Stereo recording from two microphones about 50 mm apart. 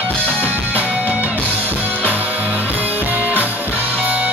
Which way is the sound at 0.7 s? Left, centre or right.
Right.